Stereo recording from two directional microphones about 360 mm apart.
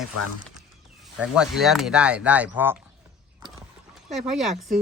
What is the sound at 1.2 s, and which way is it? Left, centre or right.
Speech, centre.